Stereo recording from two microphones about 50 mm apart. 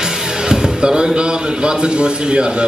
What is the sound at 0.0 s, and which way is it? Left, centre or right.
Music, centre.